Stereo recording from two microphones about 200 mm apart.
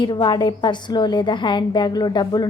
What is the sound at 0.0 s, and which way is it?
A woman's voice, 20° left (ahead or behind).